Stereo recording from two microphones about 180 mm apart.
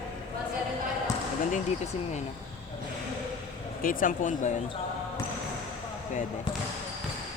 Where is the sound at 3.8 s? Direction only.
50° left (ahead or behind).